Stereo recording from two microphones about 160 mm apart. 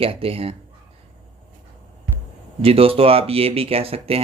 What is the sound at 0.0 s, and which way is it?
Speech, 35° right (ahead or behind).